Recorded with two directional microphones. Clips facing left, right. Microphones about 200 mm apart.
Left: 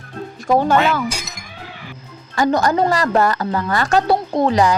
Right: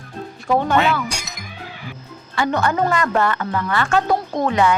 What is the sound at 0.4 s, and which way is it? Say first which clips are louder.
Speech: left 3 dB; 40° left (ahead or behind).